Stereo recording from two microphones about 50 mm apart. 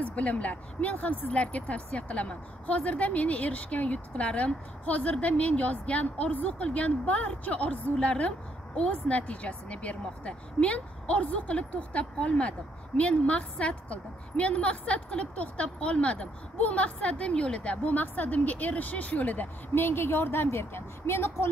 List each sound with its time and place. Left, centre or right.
0.0 s a woman's voice: left
20.5 s speech: left